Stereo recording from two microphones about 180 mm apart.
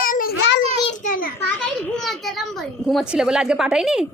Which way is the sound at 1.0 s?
50° left (ahead or behind).